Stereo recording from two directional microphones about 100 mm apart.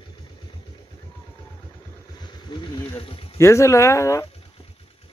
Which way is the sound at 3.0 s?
65° left (ahead or behind).